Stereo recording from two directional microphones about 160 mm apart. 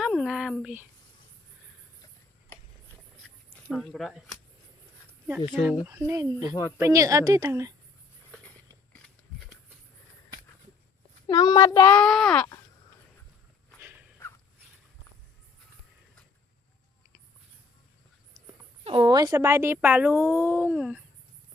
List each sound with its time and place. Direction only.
0.0 s a sound: 5° right (ahead or behind)
3.5 s speech: centre (ahead or behind)
5.5 s a woman's voice: 10° right (ahead or behind)
11.3 s speech: 30° left (ahead or behind)
11.9 s speech: 5° left (ahead or behind)
18.9 s speech: 30° right (ahead or behind); by 21.0 s 10° right (ahead or behind)